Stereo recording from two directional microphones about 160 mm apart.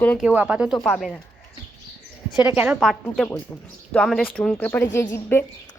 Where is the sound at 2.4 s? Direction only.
10° right (ahead or behind).